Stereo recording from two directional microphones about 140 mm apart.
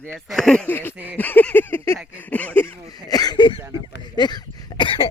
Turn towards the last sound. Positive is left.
turn(degrees=35)  # may be behind; listen again after turning